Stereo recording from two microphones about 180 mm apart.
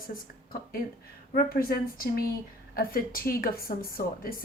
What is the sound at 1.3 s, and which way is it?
A woman's voice, 55° left (ahead or behind).